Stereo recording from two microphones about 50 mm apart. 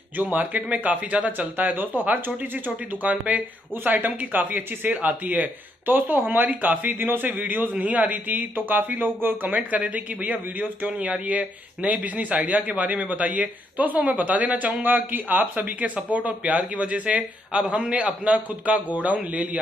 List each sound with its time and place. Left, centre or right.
0.1 s speech: right
17.6 s a man's voice: centre
17.8 s a man's voice: right